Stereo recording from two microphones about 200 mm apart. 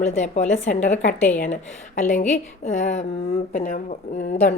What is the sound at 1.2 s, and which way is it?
Speech, 5° left (ahead or behind).